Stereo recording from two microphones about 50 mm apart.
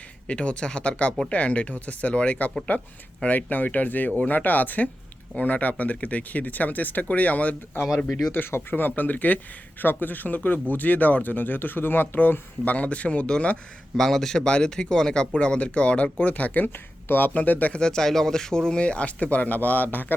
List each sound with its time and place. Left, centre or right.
0.3 s speech: left
8.3 s speech: left
13.9 s speech: centre; by 17.3 s left
17.3 s speech: left
17.7 s speech: centre; by 20.1 s left